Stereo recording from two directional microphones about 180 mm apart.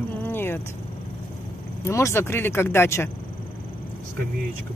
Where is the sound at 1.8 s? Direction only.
15° left (ahead or behind).